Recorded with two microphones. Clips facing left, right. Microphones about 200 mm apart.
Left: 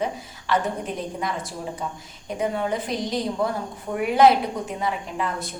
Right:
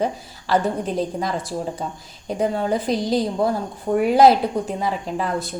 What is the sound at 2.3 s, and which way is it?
A woman's voice, 35° right (ahead or behind).